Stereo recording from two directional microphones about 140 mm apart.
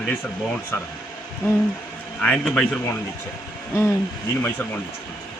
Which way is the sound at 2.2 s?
10° left (ahead or behind).